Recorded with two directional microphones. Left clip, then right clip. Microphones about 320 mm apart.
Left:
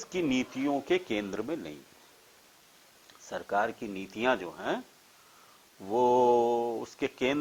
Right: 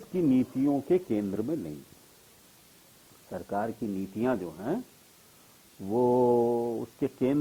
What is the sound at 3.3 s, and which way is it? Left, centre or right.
Speech, centre.